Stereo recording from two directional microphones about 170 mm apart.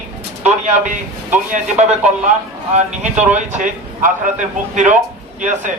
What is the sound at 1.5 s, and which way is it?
Speech, 45° right (ahead or behind).